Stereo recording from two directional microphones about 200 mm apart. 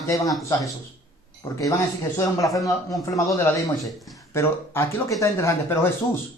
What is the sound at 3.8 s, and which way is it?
Speech, centre (ahead or behind).